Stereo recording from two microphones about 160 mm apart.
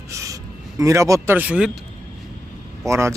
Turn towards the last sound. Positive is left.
turn(degrees=-15)  # may be behind; listen again after turning